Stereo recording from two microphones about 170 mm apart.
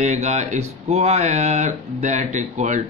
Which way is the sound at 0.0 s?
45° right (ahead or behind).